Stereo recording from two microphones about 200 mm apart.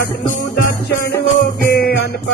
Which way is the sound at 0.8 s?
55° left (ahead or behind).